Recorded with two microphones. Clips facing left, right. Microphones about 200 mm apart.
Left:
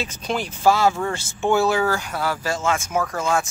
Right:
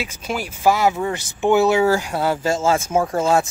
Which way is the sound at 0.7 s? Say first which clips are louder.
Right 1 dB; 20° right (ahead or behind).